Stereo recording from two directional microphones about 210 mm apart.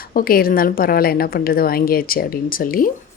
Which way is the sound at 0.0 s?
40° left (ahead or behind).